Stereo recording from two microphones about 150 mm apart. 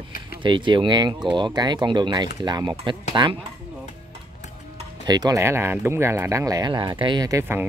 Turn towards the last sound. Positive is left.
turn(degrees=-20)  # may be behind; listen again after turning